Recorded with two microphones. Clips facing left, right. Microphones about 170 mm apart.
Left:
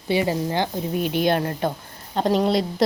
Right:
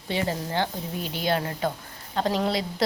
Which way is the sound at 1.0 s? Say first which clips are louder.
Left 5 dB; 60° left (ahead or behind).